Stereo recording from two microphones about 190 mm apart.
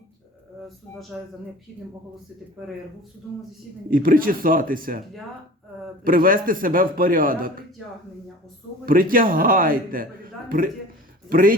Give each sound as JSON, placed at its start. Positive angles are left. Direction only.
{"t": 1.2, "sound": "speech", "side_deg": -5}
{"t": 3.8, "sound": "a man's voice", "side_deg": -50}
{"t": 6.1, "sound": "a man's voice", "side_deg": -45}
{"t": 8.9, "sound": "a man's voice", "side_deg": -50}
{"t": 11.3, "sound": "a man's voice", "side_deg": -50}